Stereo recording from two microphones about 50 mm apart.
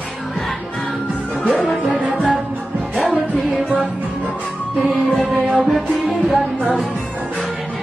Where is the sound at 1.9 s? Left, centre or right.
Right.